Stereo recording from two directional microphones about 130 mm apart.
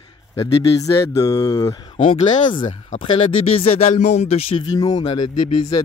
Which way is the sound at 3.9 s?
65° left (ahead or behind).